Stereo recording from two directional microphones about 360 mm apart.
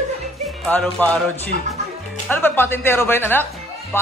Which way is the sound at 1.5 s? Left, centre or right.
Right.